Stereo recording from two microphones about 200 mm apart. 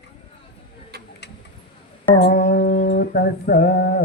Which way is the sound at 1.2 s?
60° left (ahead or behind).